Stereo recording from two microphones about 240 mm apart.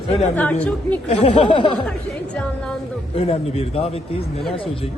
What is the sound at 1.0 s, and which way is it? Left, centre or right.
Speech, left.